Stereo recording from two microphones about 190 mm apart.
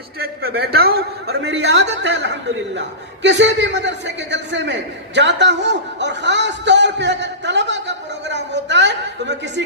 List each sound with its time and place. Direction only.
0.2 s a man's voice: 55° right (ahead or behind)